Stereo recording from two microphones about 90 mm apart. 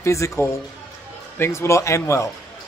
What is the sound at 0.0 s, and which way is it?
Speech, 35° left (ahead or behind).